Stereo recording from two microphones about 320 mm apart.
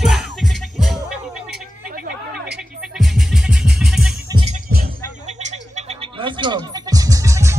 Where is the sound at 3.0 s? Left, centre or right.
Centre.